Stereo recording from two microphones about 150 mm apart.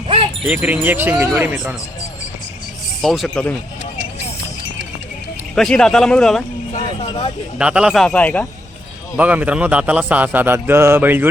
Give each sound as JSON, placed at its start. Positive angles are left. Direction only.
{"t": 0.4, "sound": "a man's voice", "side_deg": -10}
{"t": 3.0, "sound": "speech", "side_deg": 0}
{"t": 5.5, "sound": "speech", "side_deg": 5}
{"t": 7.0, "sound": "a man's voice", "side_deg": 35}
{"t": 7.6, "sound": "speech", "side_deg": -5}
{"t": 9.1, "sound": "a man's voice", "side_deg": -10}